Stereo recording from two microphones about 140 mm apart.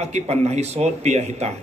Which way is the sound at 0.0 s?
50° right (ahead or behind).